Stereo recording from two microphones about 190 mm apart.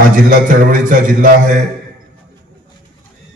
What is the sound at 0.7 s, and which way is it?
Speech, 45° right (ahead or behind).